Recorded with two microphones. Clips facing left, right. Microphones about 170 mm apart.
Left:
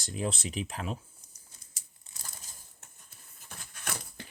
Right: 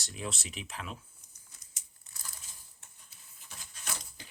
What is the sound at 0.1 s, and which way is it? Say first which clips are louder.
Speech: left 7 dB; 35° left (ahead or behind).